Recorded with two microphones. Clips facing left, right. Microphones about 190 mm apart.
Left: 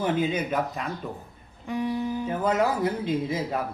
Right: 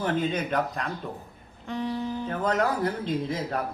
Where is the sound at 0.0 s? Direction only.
10° left (ahead or behind).